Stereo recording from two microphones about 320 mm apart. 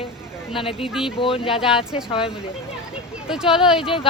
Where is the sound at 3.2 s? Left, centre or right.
Centre.